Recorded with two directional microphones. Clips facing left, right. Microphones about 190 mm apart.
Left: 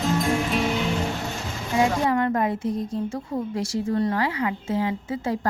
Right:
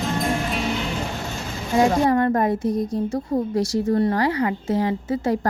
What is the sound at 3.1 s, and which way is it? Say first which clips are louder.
A woman's voice: right 5 dB; 40° right (ahead or behind).